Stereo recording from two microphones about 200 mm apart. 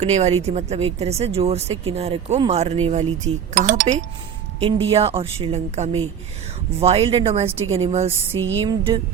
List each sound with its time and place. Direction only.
0.0 s a woman's voice: 35° right (ahead or behind)
8.4 s music: 75° right (ahead or behind)
8.6 s a woman's voice: 25° right (ahead or behind)